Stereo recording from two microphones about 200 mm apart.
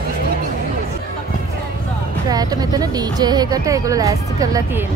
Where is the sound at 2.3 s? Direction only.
20° right (ahead or behind).